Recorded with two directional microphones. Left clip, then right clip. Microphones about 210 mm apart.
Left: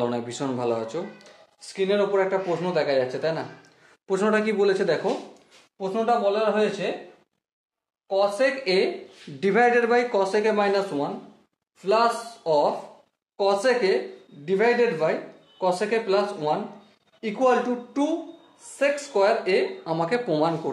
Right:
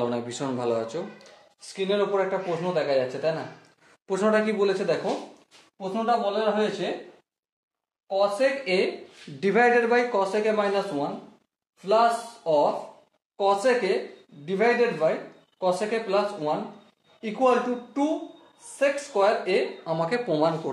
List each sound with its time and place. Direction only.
0.0 s speech: 20° left (ahead or behind); by 3.3 s 35° left (ahead or behind)
4.1 s speech: 20° left (ahead or behind)
5.8 s a man's voice: 50° left (ahead or behind)
8.1 s a man's voice: 50° left (ahead or behind)
9.4 s a man's voice: 20° left (ahead or behind); by 12.6 s 40° left (ahead or behind)
13.4 s speech: 30° left (ahead or behind)